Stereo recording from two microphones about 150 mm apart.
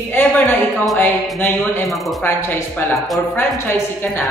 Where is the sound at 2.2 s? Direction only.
15° left (ahead or behind).